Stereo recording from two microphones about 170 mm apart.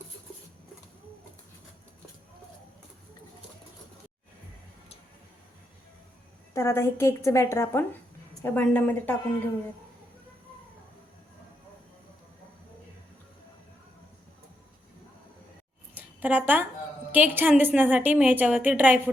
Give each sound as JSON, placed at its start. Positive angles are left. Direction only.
{"t": 6.5, "sound": "a woman's voice", "side_deg": 15}
{"t": 16.0, "sound": "a sound", "side_deg": -10}
{"t": 17.2, "sound": "a woman's voice", "side_deg": -10}